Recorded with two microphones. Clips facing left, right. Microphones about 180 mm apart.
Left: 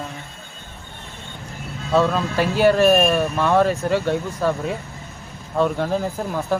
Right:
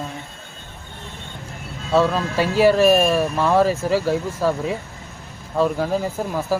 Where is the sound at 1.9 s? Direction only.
Centre (ahead or behind).